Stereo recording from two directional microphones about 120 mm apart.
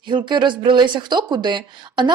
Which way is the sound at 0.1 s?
40° right (ahead or behind).